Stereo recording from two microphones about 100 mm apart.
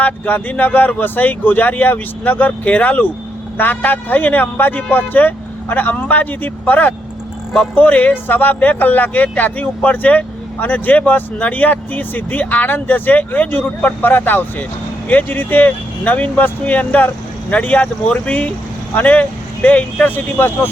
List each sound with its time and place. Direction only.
0.0 s speech: 15° left (ahead or behind)